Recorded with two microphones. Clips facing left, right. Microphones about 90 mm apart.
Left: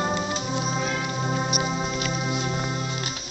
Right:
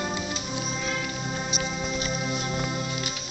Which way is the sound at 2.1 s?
15° left (ahead or behind).